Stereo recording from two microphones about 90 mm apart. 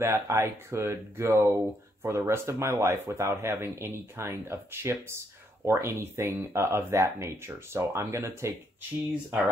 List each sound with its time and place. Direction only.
0.0 s speech: 30° right (ahead or behind)